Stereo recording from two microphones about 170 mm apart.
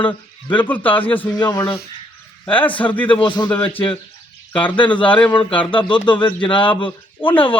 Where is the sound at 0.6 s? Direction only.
10° left (ahead or behind).